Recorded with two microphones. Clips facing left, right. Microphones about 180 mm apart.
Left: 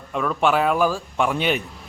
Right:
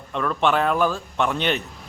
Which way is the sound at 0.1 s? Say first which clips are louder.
Left 1 dB; 5° left (ahead or behind).